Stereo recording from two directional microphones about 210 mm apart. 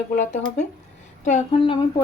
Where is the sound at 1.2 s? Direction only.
35° left (ahead or behind).